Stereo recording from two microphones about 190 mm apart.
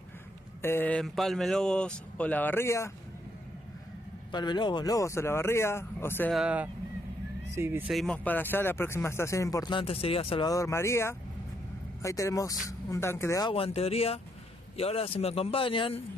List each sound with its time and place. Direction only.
0.6 s speech: 10° left (ahead or behind)
4.3 s speech: 25° left (ahead or behind)
6.3 s speech: 5° right (ahead or behind)
7.9 s speech: 5° left (ahead or behind); by 10.5 s 30° left (ahead or behind)
10.5 s speech: 15° left (ahead or behind)
13.7 s a man's voice: 30° left (ahead or behind)